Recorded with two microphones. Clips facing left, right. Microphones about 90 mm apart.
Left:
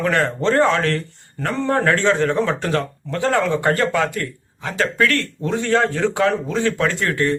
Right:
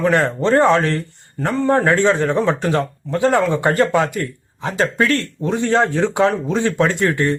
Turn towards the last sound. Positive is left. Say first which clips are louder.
# right 2 dB
turn(degrees=-20)  # may be behind; listen again after turning